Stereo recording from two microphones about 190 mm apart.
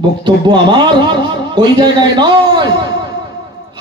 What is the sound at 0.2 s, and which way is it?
A man's voice, 25° right (ahead or behind).